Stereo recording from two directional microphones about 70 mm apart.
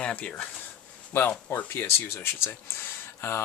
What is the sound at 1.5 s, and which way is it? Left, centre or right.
Speech, left.